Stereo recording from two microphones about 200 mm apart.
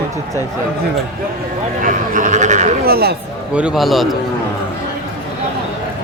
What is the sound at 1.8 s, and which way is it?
Speech, 40° right (ahead or behind).